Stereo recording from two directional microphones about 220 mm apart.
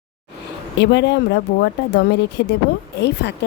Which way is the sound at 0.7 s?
50° left (ahead or behind).